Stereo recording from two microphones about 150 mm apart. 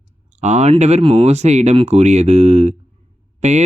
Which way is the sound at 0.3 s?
50° right (ahead or behind).